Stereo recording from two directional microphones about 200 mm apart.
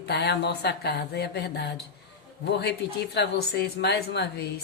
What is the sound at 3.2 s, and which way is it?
Speech, 55° left (ahead or behind).